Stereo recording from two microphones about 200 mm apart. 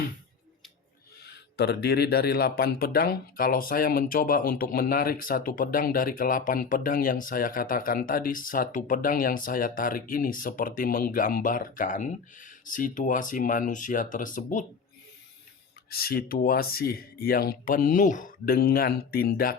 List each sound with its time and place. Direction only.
1.2 s speech: 55° left (ahead or behind)
15.9 s speech: 50° left (ahead or behind)